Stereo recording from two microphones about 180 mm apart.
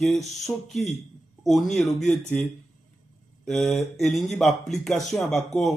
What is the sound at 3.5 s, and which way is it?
Speech, centre (ahead or behind).